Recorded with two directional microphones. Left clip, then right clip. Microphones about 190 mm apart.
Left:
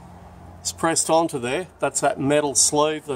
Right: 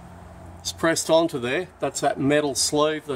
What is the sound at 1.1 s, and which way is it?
Speech, 5° left (ahead or behind).